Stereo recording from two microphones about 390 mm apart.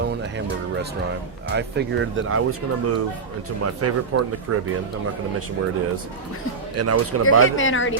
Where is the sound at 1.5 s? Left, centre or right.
Right.